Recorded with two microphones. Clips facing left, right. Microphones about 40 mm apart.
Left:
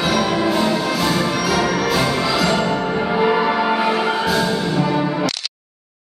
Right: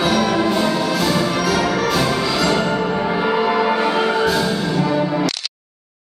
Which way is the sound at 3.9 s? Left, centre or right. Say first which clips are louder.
Right 1 dB; centre.